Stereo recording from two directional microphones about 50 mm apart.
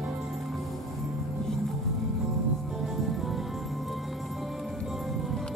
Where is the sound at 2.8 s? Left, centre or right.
Centre.